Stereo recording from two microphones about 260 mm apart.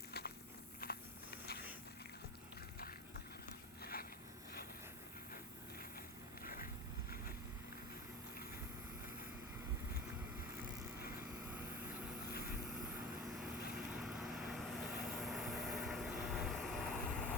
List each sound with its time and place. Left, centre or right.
0.1 s walk: left
6.4 s vehicle: left
13.7 s vehicle: centre